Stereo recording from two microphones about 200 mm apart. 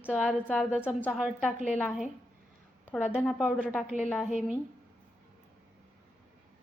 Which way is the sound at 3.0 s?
5° right (ahead or behind).